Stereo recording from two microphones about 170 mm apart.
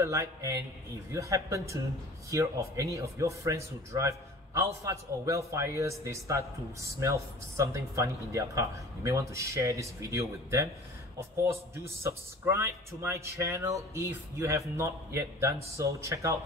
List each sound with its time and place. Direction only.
0.0 s speech: 15° right (ahead or behind)
11.7 s speech: 15° right (ahead or behind)